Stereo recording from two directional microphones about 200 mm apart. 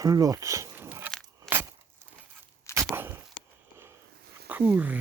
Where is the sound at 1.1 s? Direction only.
5° left (ahead or behind).